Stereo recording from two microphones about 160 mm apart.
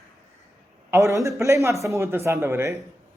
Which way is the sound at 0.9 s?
20° right (ahead or behind).